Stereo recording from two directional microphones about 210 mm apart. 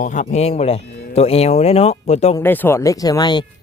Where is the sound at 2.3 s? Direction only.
10° left (ahead or behind).